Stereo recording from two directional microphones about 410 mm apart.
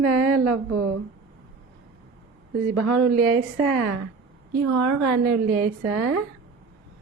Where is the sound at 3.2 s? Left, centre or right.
Right.